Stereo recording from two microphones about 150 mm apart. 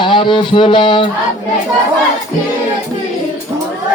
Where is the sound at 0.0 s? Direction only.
30° left (ahead or behind).